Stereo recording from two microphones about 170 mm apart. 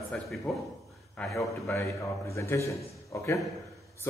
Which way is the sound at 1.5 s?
15° left (ahead or behind).